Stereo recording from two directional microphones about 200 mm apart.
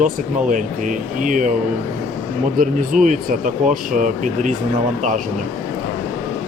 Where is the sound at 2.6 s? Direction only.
45° right (ahead or behind).